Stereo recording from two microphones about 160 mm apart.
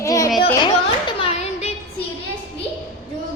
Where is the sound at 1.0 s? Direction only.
35° left (ahead or behind).